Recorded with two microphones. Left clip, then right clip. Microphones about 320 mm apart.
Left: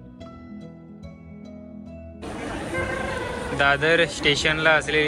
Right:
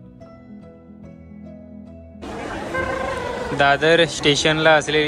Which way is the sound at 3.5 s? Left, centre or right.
Centre.